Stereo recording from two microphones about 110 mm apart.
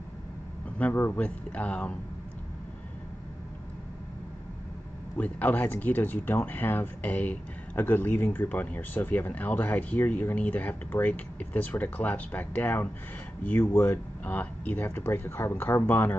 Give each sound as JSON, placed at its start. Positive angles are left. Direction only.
{"t": 0.7, "sound": "speech", "side_deg": 15}
{"t": 5.1, "sound": "speech", "side_deg": 15}